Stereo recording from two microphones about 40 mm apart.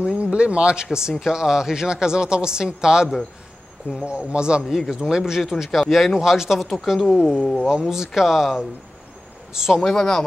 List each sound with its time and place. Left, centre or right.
0.0 s speech: right
1.2 s speech: centre
4.0 s speech: right
4.6 s speech: centre
6.1 s speech: centre
9.8 s speech: centre